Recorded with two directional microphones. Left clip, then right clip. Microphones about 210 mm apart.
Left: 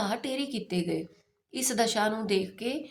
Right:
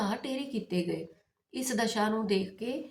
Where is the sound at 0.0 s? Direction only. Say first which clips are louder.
Left 3 dB; 45° left (ahead or behind).